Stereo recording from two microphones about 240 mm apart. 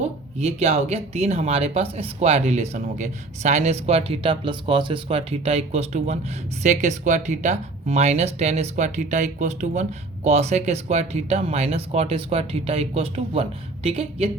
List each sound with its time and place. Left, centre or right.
0.3 s speech: right